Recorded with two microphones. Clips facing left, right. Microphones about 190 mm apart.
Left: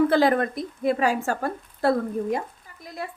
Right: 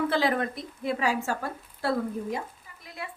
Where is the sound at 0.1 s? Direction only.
50° left (ahead or behind).